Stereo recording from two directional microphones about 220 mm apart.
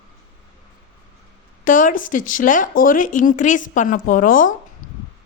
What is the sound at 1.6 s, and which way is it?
Speech, 35° left (ahead or behind).